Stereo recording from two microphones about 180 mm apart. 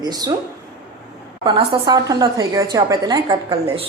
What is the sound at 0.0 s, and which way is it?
Speech, 20° right (ahead or behind).